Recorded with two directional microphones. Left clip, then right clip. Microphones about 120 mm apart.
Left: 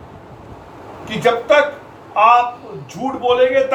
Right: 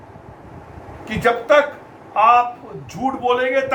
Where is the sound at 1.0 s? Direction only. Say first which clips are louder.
Left 2 dB; 35° right (ahead or behind).